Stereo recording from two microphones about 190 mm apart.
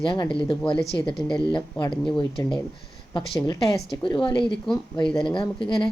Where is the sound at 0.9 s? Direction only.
20° left (ahead or behind).